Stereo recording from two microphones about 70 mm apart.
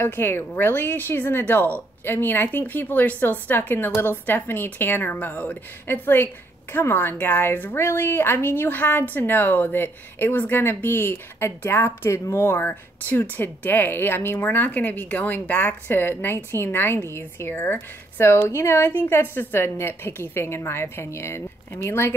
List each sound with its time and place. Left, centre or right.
0.0 s a woman's voice: left